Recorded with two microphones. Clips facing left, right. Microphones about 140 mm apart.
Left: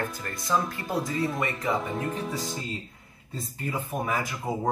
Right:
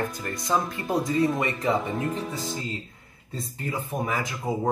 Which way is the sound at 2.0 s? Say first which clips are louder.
Right 2 dB; centre (ahead or behind).